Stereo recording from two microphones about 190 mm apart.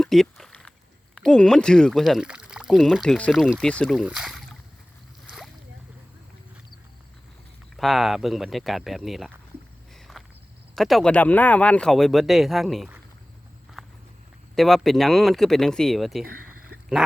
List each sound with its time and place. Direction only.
0.0 s a sound: centre (ahead or behind)
1.1 s speech: 5° left (ahead or behind)
7.8 s speech: centre (ahead or behind)
9.9 s walk: centre (ahead or behind)
10.8 s speech: centre (ahead or behind)
13.8 s walk: centre (ahead or behind)
14.5 s speech: centre (ahead or behind)
16.2 s a sound: 50° right (ahead or behind)